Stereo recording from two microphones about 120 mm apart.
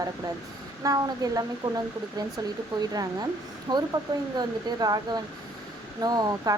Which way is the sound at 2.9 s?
30° right (ahead or behind).